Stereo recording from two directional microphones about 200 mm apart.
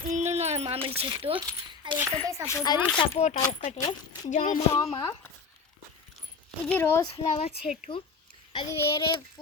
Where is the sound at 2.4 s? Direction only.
20° left (ahead or behind).